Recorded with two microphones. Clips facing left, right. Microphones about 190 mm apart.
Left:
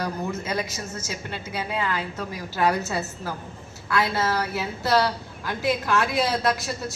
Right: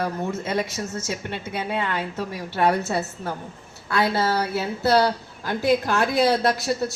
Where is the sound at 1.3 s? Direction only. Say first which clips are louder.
Even; 25° right (ahead or behind).